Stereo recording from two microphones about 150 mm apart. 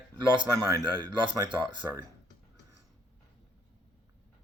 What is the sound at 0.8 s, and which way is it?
Speech, 30° right (ahead or behind).